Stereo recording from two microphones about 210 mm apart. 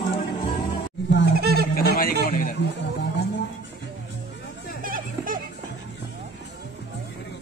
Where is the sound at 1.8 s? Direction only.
45° left (ahead or behind).